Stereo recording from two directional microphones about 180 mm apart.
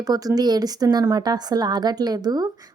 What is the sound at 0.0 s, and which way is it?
A woman's voice, 20° right (ahead or behind).